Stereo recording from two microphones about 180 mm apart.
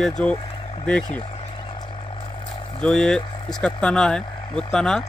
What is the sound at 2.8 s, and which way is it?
Speech, 5° left (ahead or behind).